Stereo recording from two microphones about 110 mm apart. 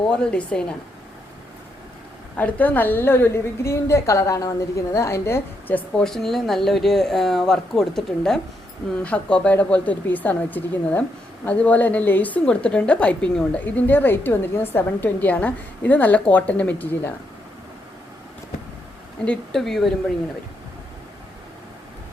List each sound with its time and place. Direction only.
0.0 s a woman's voice: 5° left (ahead or behind)
2.3 s a woman's voice: 15° left (ahead or behind)
6.0 s a woman's voice: 5° left (ahead or behind)
19.2 s speech: 5° left (ahead or behind)